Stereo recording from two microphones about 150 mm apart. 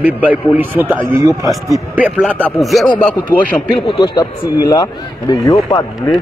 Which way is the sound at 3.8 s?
30° left (ahead or behind).